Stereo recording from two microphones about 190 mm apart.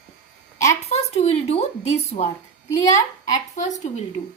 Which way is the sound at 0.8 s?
35° left (ahead or behind).